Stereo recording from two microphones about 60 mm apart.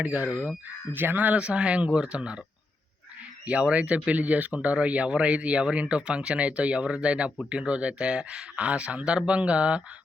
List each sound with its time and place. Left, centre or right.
0.0 s speech: right
1.4 s speech: centre
3.4 s speech: right